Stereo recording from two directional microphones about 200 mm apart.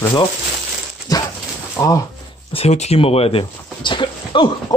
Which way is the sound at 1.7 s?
15° left (ahead or behind).